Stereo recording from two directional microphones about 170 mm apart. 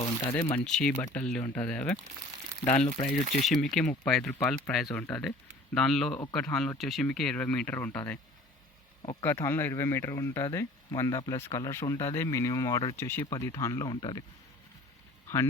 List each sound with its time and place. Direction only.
0.5 s speech: 5° left (ahead or behind)
2.6 s speech: 40° left (ahead or behind)
3.4 s speech: centre (ahead or behind); by 14.3 s 25° left (ahead or behind)